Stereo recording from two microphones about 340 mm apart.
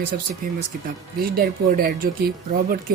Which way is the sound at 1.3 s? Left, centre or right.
Right.